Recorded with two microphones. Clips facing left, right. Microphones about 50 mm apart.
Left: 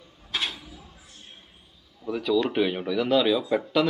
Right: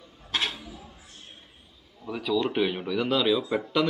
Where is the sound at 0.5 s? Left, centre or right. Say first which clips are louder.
Right 2 dB; right.